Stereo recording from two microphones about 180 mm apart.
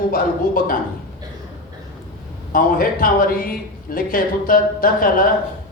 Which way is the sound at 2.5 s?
50° left (ahead or behind).